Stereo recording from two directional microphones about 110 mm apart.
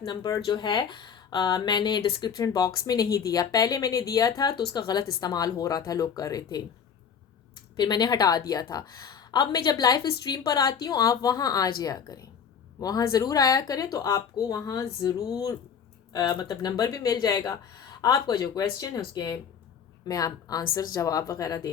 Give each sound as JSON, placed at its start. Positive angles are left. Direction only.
{"t": 0.0, "sound": "speech", "side_deg": 40}
{"t": 16.1, "sound": "speech", "side_deg": 40}